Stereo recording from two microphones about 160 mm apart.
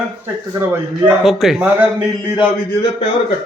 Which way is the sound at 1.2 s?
Centre (ahead or behind).